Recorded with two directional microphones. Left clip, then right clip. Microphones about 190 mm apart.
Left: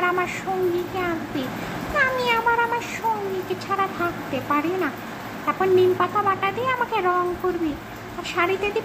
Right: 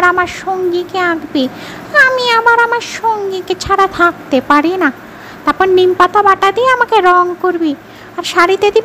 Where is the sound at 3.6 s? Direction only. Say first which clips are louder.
Right 15 dB; 55° right (ahead or behind).